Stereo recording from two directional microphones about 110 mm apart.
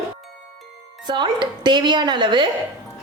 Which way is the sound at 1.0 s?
45° right (ahead or behind).